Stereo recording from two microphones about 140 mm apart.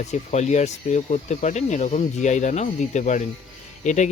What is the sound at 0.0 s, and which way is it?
Speech, 55° left (ahead or behind).